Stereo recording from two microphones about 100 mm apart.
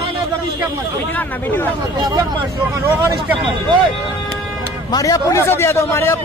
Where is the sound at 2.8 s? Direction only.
25° right (ahead or behind).